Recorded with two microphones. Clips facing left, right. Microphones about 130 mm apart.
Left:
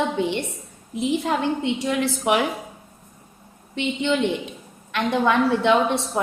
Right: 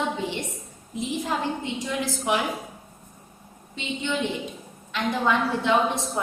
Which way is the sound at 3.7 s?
70° left (ahead or behind).